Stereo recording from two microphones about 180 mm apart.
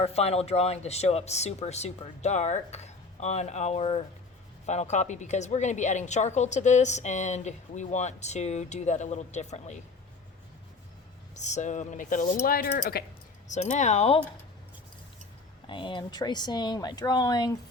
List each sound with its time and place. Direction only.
0.0 s a woman's voice: 35° left (ahead or behind)
11.3 s speech: 40° left (ahead or behind); by 13.1 s 60° left (ahead or behind)
13.5 s a woman's voice: 40° left (ahead or behind)
15.6 s speech: 25° left (ahead or behind)